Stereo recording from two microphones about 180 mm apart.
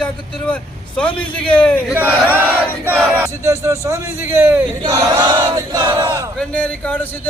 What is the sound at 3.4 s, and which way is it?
A man's voice, 15° right (ahead or behind).